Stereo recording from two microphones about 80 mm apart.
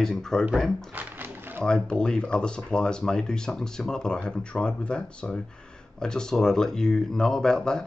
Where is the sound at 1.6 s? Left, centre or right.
Centre.